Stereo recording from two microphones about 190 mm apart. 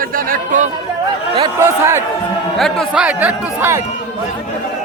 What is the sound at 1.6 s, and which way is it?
Speech, 15° right (ahead or behind).